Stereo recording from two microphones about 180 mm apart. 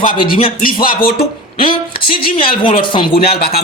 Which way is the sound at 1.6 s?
30° left (ahead or behind).